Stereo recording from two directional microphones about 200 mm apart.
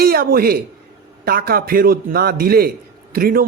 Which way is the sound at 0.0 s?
50° right (ahead or behind).